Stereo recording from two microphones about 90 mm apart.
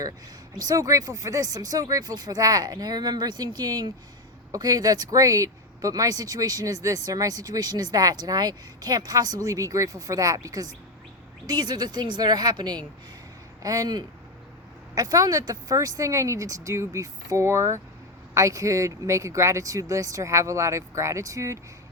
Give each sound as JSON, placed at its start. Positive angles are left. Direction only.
{"t": 0.5, "sound": "speech", "side_deg": -45}
{"t": 13.6, "sound": "speech", "side_deg": -40}